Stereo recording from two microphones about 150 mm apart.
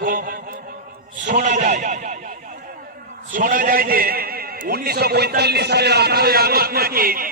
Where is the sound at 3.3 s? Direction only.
65° right (ahead or behind).